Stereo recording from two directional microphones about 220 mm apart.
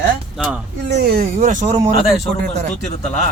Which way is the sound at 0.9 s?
45° right (ahead or behind).